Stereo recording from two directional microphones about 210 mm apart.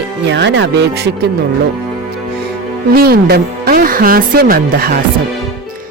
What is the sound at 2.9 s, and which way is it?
Speech, 45° right (ahead or behind).